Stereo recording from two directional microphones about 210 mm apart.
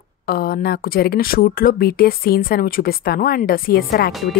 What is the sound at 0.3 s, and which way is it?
Speech, 45° left (ahead or behind).